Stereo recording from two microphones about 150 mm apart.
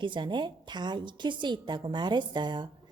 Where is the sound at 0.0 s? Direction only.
30° right (ahead or behind).